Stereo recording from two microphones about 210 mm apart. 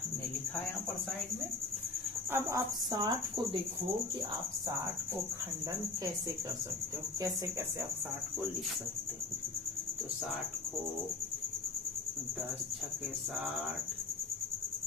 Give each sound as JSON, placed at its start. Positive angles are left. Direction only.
{"t": 2.3, "sound": "speech", "side_deg": -15}